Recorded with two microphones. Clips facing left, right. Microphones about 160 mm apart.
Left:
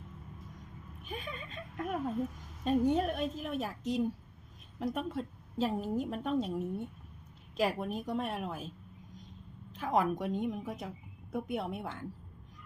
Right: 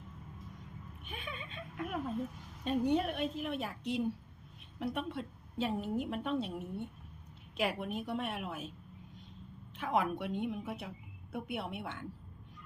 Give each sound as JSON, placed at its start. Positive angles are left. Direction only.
{"t": 1.0, "sound": "a woman's voice", "side_deg": 40}
{"t": 9.7, "sound": "a woman's voice", "side_deg": 40}